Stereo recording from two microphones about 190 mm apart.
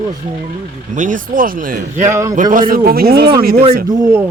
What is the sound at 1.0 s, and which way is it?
Speech, 45° right (ahead or behind).